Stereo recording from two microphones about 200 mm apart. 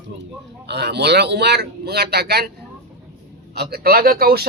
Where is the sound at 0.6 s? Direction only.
55° right (ahead or behind).